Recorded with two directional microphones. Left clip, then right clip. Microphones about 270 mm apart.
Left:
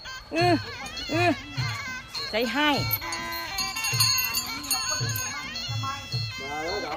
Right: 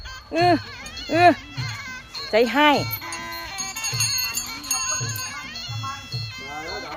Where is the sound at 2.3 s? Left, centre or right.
Centre.